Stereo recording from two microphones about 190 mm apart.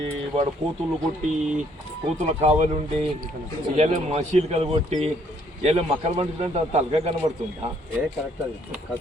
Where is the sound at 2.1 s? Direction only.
35° right (ahead or behind).